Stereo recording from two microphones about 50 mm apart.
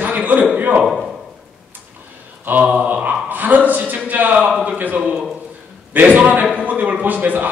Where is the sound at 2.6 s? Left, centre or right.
Right.